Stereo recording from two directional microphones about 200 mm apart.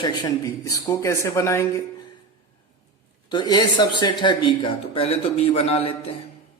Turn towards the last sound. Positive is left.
turn(degrees=30)  # may be behind; listen again after turning